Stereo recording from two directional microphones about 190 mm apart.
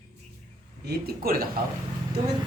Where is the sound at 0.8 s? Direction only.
55° right (ahead or behind).